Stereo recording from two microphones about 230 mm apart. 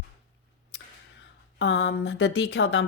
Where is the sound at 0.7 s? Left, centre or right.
Left.